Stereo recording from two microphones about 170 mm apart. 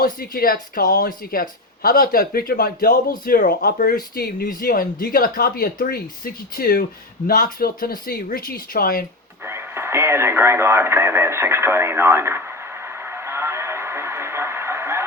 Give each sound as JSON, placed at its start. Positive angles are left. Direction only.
{"t": 0.0, "sound": "speech", "side_deg": 60}
{"t": 9.4, "sound": "radio", "side_deg": -15}